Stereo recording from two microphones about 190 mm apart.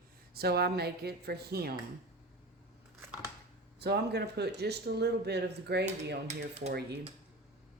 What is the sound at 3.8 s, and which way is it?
Speech, 60° right (ahead or behind).